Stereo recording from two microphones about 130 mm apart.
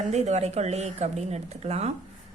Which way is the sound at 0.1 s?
60° right (ahead or behind).